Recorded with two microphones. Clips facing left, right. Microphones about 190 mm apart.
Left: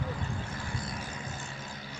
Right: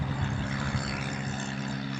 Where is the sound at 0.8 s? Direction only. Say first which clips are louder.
Right 4 dB; 70° right (ahead or behind).